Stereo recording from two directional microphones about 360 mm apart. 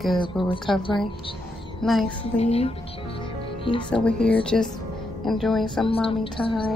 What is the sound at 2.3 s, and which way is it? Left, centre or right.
Speech, centre.